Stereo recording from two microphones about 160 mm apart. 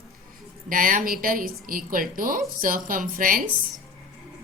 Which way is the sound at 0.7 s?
60° right (ahead or behind).